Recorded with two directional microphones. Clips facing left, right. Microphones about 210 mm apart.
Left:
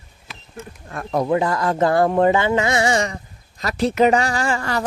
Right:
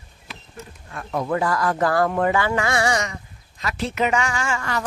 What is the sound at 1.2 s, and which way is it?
Speech, 20° left (ahead or behind).